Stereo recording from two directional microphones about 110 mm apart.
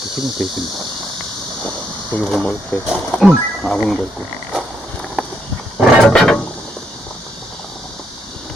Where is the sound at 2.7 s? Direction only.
15° left (ahead or behind).